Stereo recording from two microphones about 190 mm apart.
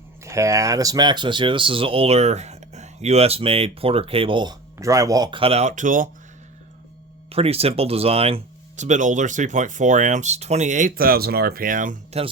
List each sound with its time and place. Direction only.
0.3 s speech: 15° right (ahead or behind); by 6.1 s 45° right (ahead or behind)
7.3 s speech: 30° right (ahead or behind)